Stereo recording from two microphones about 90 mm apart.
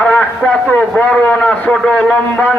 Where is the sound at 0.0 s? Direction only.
10° left (ahead or behind).